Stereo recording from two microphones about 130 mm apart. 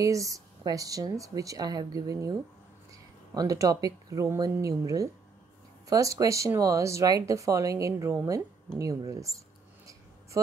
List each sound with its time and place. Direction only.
0.0 s speech: 25° right (ahead or behind)
10.3 s speech: 25° right (ahead or behind)